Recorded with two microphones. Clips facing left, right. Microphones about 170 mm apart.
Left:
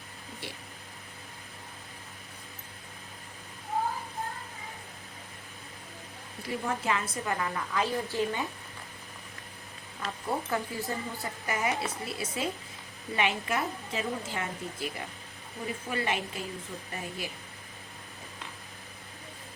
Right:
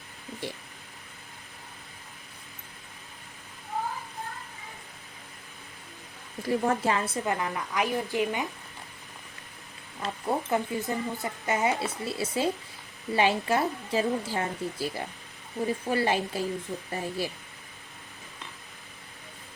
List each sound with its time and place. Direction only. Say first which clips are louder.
6.4 s speech: right 7 dB; 40° right (ahead or behind); by 8.4 s 15° right (ahead or behind)
10.0 s a woman's voice: right 3 dB; 20° right (ahead or behind)